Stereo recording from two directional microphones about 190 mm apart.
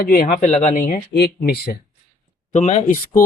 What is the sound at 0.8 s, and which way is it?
Speech, 45° left (ahead or behind).